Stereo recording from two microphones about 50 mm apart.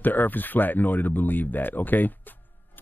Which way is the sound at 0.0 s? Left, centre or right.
Left.